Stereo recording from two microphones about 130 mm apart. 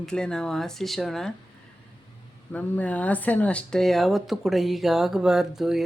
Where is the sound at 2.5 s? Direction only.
10° left (ahead or behind).